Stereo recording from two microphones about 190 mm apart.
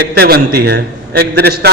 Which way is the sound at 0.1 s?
55° right (ahead or behind).